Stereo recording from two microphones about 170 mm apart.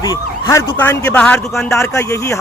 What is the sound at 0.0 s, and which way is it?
Speech, 20° left (ahead or behind).